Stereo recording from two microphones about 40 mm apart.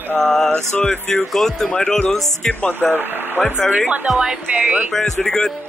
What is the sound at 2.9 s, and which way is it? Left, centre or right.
Speech, right.